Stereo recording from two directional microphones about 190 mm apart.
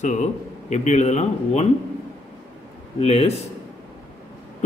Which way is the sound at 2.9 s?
35° left (ahead or behind).